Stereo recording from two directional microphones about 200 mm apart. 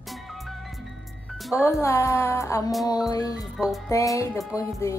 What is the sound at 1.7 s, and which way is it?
Speech, 15° left (ahead or behind).